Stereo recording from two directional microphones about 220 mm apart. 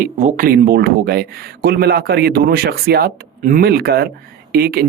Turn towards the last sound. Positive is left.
turn(degrees=-45)  # may be behind; listen again after turning